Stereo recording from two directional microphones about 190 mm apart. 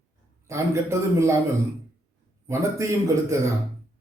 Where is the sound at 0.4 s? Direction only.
15° right (ahead or behind).